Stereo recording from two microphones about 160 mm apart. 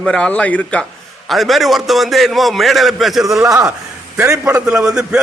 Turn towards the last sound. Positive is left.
turn(degrees=-5)  # may be behind; listen again after turning